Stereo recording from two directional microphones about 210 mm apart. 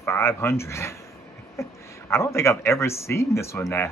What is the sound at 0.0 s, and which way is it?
Speech, 10° left (ahead or behind).